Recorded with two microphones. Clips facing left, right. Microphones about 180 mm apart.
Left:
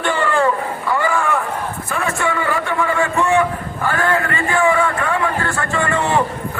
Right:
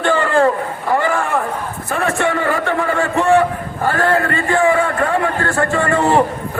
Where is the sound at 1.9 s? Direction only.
45° right (ahead or behind).